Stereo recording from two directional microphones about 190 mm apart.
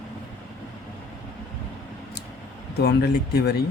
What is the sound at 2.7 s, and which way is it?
Speech, 60° left (ahead or behind).